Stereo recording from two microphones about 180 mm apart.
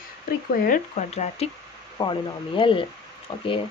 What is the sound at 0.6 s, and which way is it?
Speech, 45° left (ahead or behind).